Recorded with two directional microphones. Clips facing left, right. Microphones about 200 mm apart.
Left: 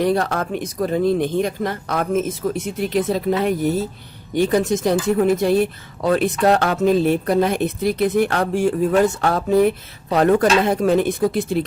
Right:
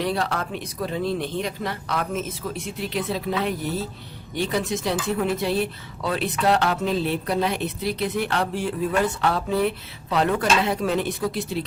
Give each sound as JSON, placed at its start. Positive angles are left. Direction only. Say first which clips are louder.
{"t": 0.0, "sound": "speech", "louder": "left 6 dB", "side_deg": 45}